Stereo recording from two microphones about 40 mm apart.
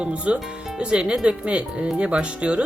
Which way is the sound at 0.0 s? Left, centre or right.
Right.